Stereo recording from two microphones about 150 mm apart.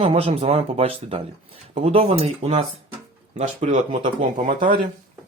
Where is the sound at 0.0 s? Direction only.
40° right (ahead or behind); by 4.9 s 65° right (ahead or behind).